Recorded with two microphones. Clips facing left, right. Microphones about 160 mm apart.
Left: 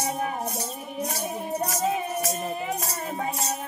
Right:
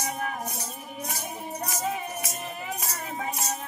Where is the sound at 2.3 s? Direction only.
30° left (ahead or behind).